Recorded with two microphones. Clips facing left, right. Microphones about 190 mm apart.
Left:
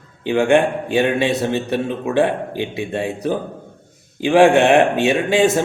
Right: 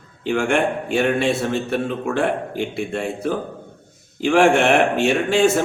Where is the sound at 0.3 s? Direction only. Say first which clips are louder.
Left 4 dB; 20° left (ahead or behind).